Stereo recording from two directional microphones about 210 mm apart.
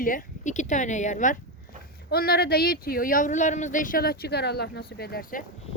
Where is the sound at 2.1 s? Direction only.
45° left (ahead or behind).